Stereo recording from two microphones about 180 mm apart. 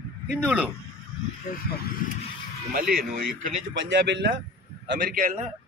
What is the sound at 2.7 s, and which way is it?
Speech, 55° right (ahead or behind).